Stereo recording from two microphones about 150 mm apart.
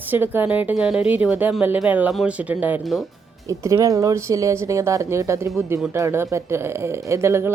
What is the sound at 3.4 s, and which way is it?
A woman's voice, 20° right (ahead or behind).